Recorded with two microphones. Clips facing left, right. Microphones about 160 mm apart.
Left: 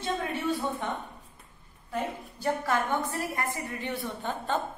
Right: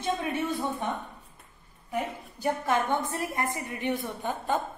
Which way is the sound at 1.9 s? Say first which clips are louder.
Right 1 dB; 15° right (ahead or behind).